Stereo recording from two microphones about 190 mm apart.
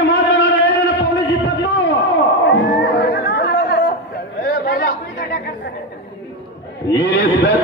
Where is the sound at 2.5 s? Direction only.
65° left (ahead or behind).